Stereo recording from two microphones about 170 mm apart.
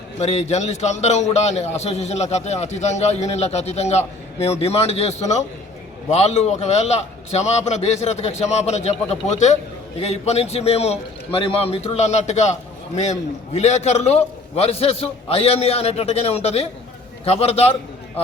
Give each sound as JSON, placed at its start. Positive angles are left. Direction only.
{"t": 0.2, "sound": "a man's voice", "side_deg": 40}